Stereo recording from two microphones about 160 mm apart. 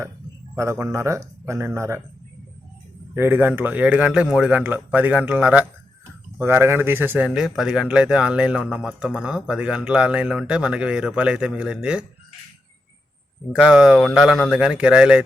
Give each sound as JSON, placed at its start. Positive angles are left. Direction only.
{"t": 0.5, "sound": "speech", "side_deg": -15}
{"t": 3.2, "sound": "a man's voice", "side_deg": -15}
{"t": 13.5, "sound": "a man's voice", "side_deg": -5}